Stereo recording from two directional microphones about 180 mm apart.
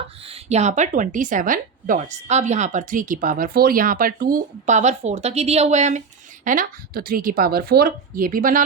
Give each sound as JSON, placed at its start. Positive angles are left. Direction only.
{"t": 0.3, "sound": "a woman's voice", "side_deg": -40}